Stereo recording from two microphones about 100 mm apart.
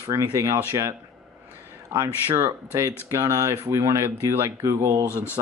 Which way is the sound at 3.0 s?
30° right (ahead or behind).